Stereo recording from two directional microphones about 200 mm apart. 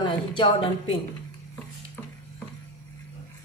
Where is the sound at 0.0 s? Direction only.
25° left (ahead or behind).